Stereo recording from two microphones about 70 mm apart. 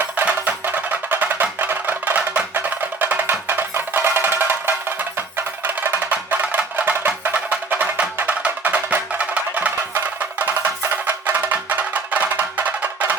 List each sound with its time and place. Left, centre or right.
0.3 s music: right
5.6 s wood block: right
10.4 s music: right